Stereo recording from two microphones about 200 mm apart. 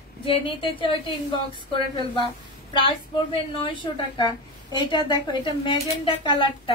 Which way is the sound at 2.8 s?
25° left (ahead or behind).